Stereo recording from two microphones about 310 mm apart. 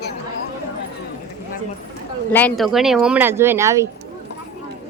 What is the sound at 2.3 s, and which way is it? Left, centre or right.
Speech, centre.